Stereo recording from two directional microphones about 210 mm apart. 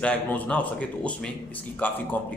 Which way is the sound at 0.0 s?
5° left (ahead or behind).